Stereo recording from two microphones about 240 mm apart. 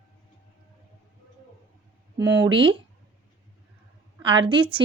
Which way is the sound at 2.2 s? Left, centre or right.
Centre.